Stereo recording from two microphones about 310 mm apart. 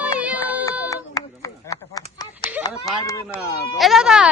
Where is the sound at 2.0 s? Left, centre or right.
Centre.